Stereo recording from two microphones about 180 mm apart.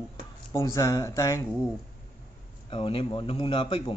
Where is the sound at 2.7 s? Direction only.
30° left (ahead or behind).